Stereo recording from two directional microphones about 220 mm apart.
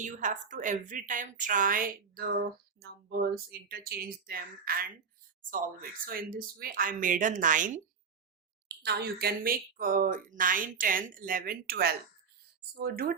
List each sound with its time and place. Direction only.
0.0 s a woman's voice: 35° right (ahead or behind)
8.6 s a woman's voice: 50° right (ahead or behind)